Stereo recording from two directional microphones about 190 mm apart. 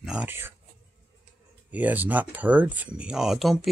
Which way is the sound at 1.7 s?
10° right (ahead or behind).